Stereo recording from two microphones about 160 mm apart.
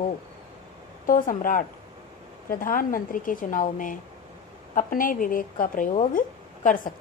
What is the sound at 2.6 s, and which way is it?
A woman's voice, 60° left (ahead or behind).